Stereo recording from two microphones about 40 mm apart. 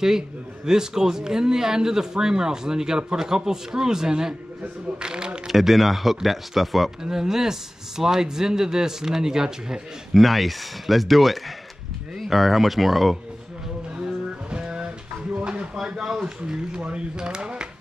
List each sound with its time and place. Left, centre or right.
0.7 s speech: centre
5.5 s speech: centre
7.0 s speech: centre
10.1 s speech: centre
14.5 s music: right
15.4 s a sound: right
15.7 s a sound: centre
16.8 s speech: right